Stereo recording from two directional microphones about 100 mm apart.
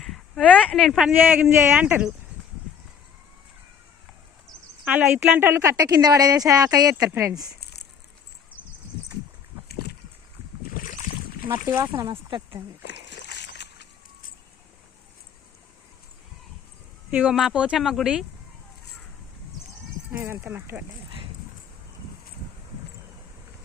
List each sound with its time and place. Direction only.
0.0 s a sound: centre (ahead or behind)
0.4 s speech: 10° left (ahead or behind)
1.4 s speech: 20° right (ahead or behind)
4.9 s a woman's voice: 15° right (ahead or behind); by 6.9 s 40° right (ahead or behind)
7.1 s speech: 25° right (ahead or behind)
11.4 s speech: 40° right (ahead or behind)
11.7 s a woman's voice: 30° right (ahead or behind)
12.0 s speech: 55° right (ahead or behind)
17.1 s speech: 10° right (ahead or behind)
20.1 s speech: 25° right (ahead or behind)